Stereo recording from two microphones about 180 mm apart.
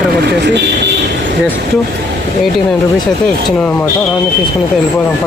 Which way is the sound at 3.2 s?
5° left (ahead or behind).